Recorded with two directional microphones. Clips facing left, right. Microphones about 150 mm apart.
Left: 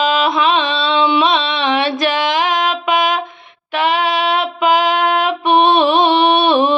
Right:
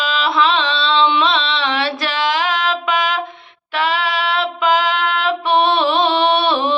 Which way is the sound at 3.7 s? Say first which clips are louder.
Left 3 dB; 20° left (ahead or behind).